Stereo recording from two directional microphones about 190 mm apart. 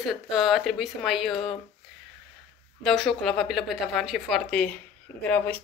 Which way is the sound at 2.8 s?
Centre (ahead or behind).